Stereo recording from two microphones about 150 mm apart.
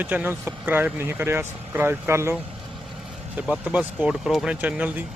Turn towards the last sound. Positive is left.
turn(degrees=-10)  # may be behind; listen again after turning